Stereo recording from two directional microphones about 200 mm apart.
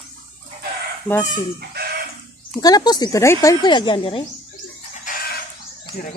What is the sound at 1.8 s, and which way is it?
Chicken, 50° right (ahead or behind).